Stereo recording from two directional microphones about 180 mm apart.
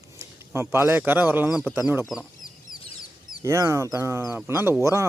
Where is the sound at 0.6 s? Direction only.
15° right (ahead or behind).